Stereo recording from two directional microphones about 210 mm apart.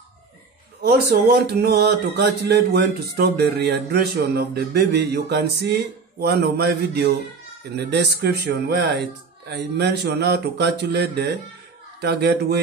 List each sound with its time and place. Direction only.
0.8 s speech: 50° right (ahead or behind)